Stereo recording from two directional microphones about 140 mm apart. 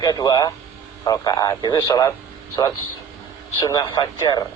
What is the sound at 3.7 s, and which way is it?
Speech, 25° left (ahead or behind).